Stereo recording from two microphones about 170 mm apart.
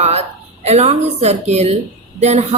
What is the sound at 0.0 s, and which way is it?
A woman's voice, 40° right (ahead or behind).